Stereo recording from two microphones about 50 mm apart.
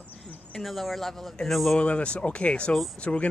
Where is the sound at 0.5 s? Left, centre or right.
Centre.